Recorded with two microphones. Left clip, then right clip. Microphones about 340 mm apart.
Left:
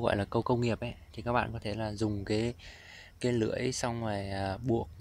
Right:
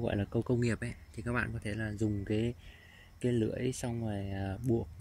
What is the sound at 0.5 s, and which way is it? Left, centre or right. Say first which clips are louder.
Speech: left 2 dB; centre.